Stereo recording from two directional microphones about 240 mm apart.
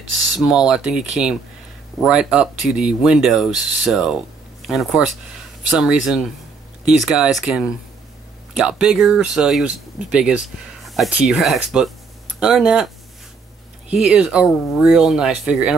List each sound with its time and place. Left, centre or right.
0.3 s speech: centre